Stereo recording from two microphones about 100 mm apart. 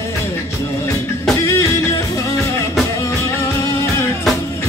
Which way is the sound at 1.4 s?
30° left (ahead or behind).